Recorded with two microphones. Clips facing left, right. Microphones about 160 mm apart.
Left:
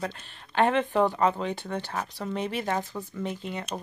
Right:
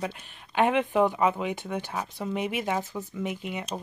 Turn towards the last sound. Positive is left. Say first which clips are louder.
# right 1 dB
turn(degrees=-10)  # may be behind; listen again after turning